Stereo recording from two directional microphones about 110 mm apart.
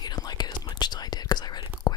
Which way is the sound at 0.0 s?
40° left (ahead or behind).